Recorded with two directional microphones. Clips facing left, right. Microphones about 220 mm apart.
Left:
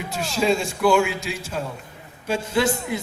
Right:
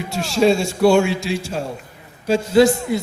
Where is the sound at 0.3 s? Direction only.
30° right (ahead or behind).